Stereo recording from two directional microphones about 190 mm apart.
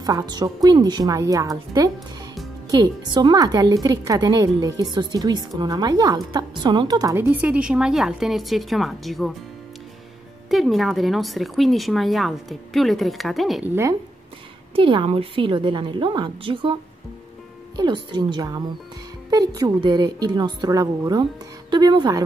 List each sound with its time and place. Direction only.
0.0 s a woman's voice: 20° right (ahead or behind); by 9.3 s centre (ahead or behind)
10.5 s speech: centre (ahead or behind)
14.8 s a woman's voice: 25° right (ahead or behind)
17.7 s a woman's voice: 20° right (ahead or behind)